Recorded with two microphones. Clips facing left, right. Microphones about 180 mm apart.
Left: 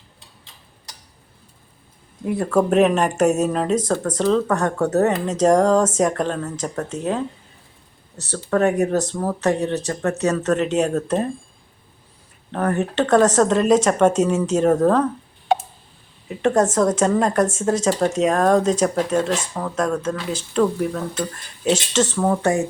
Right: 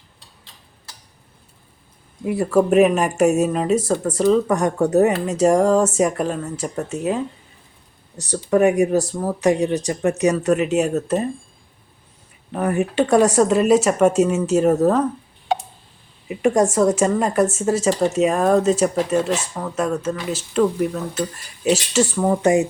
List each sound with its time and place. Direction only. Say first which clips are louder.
2.2 s speech: right 2 dB; 5° right (ahead or behind)
8.2 s speech: right 3 dB; 15° right (ahead or behind)
12.5 s speech: right 1 dB; 10° right (ahead or behind)
15.5 s a sound: left 3 dB; 55° left (ahead or behind)
16.3 s speech: right 1 dB; 10° right (ahead or behind)